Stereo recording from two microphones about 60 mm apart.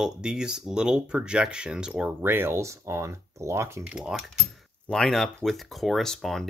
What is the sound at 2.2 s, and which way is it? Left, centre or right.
Speech, right.